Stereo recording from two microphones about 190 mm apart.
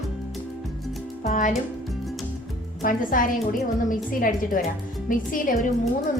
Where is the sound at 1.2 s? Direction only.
40° left (ahead or behind).